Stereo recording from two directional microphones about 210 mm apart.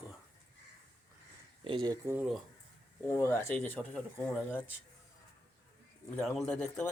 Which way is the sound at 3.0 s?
10° left (ahead or behind).